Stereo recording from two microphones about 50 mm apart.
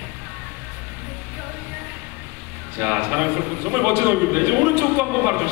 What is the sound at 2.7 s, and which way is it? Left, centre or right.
A man's voice, right.